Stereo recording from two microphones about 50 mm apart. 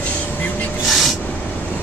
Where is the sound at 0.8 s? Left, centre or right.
Centre.